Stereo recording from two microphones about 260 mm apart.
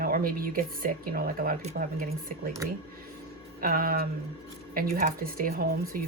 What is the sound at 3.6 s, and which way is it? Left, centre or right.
Speech, right.